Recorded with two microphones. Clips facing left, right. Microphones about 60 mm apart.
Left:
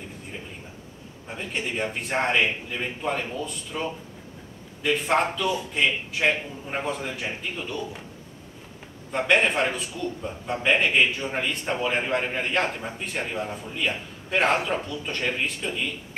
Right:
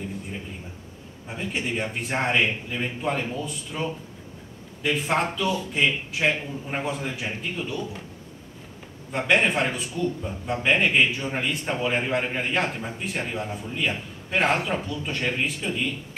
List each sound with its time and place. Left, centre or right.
1.2 s speech: centre
9.1 s speech: centre